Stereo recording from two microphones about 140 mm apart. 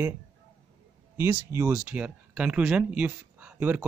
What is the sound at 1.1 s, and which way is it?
Speech, 15° right (ahead or behind).